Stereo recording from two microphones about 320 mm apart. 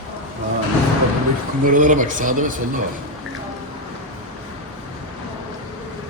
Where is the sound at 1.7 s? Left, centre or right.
Right.